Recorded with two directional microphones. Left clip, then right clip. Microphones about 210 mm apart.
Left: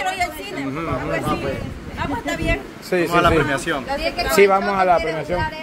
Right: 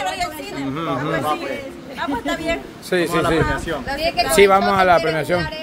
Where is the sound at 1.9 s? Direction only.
5° left (ahead or behind).